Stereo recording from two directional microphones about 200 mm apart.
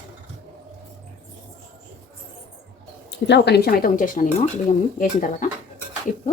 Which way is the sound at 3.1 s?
60° left (ahead or behind).